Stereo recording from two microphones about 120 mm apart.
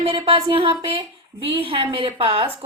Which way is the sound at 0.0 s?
45° right (ahead or behind).